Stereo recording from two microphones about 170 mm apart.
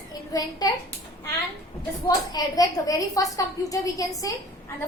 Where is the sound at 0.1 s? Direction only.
20° left (ahead or behind).